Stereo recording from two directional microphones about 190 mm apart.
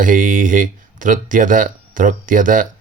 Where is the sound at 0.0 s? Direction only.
45° right (ahead or behind).